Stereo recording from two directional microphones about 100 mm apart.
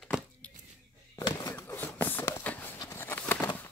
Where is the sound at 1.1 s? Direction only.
35° left (ahead or behind).